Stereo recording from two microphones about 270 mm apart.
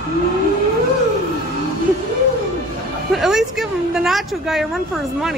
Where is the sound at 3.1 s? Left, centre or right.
Centre.